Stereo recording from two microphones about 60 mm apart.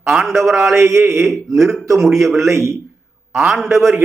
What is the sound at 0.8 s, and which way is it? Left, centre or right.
Speech, right.